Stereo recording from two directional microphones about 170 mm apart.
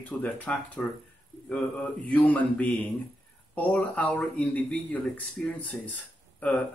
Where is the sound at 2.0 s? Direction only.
10° left (ahead or behind).